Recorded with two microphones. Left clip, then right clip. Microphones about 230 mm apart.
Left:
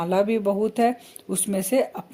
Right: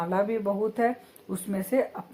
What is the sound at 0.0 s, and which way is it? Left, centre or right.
A woman's voice, left.